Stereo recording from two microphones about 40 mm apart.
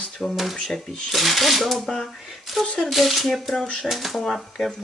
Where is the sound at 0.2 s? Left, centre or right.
Centre.